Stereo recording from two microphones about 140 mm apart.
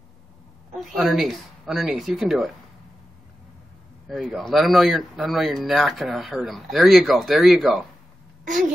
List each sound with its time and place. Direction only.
0.7 s speech: centre (ahead or behind)
4.1 s speech: centre (ahead or behind)